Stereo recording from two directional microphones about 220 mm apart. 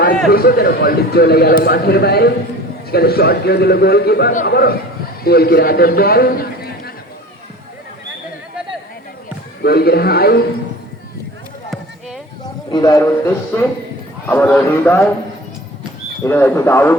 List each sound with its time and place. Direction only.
0.3 s a man's voice: 45° left (ahead or behind)
9.6 s a man's voice: 45° left (ahead or behind)
12.7 s a man's voice: 15° left (ahead or behind)
16.2 s a man's voice: 10° left (ahead or behind)